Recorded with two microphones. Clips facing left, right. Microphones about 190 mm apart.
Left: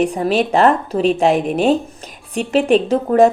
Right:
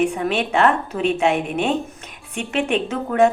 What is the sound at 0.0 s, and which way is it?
A woman's voice, 35° left (ahead or behind).